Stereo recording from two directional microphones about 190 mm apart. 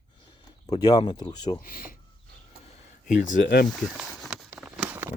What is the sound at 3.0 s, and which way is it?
Speech, 40° left (ahead or behind).